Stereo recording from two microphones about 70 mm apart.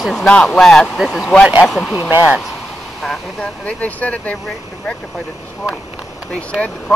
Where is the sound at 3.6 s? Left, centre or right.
Centre.